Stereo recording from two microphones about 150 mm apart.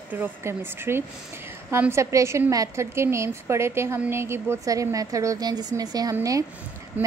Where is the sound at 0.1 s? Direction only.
15° right (ahead or behind).